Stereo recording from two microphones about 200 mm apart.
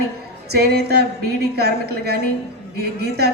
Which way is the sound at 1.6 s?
55° right (ahead or behind).